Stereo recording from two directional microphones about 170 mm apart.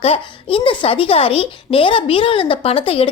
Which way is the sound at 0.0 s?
35° left (ahead or behind).